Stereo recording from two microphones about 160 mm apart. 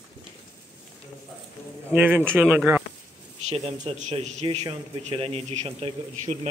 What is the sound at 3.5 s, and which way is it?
A man's voice, 40° right (ahead or behind).